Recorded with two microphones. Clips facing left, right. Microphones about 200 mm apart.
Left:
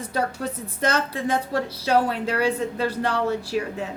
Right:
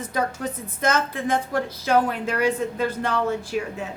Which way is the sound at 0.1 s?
30° left (ahead or behind).